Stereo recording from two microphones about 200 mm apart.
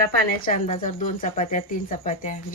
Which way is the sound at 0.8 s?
40° left (ahead or behind).